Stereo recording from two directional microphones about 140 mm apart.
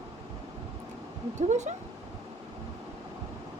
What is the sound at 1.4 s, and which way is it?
Speech, 55° right (ahead or behind).